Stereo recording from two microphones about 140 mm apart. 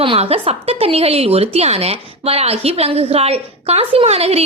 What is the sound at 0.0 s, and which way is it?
A woman's voice, 40° right (ahead or behind).